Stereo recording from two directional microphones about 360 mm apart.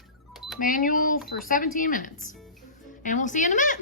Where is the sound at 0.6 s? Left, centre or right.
Left.